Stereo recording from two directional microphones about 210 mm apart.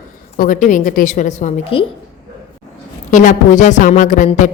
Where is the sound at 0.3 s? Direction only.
40° left (ahead or behind).